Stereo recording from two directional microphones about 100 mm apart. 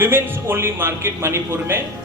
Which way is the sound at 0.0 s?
25° right (ahead or behind).